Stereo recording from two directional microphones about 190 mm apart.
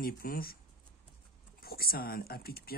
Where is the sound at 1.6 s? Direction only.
55° left (ahead or behind).